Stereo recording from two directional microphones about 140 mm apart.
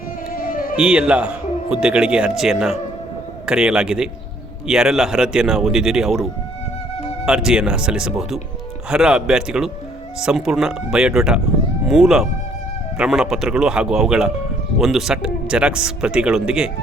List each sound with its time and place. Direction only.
0.3 s a sound: 80° left
0.8 s a man's voice: 5° right (ahead or behind)
7.3 s speech: 5° right (ahead or behind)